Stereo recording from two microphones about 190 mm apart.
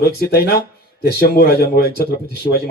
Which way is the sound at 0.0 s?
55° left (ahead or behind).